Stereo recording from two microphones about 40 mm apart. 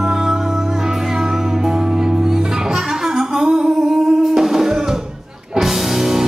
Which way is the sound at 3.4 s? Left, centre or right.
Right.